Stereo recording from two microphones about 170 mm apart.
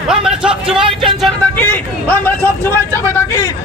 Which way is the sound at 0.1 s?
5° right (ahead or behind).